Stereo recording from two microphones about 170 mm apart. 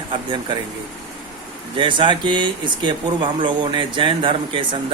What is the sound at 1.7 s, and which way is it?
Speech, 30° right (ahead or behind).